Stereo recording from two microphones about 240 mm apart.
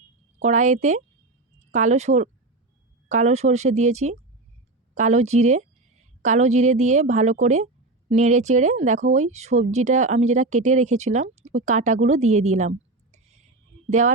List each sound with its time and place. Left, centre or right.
0.4 s speech: right